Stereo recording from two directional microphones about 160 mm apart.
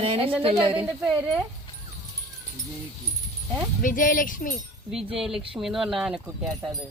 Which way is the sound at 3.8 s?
55° left (ahead or behind).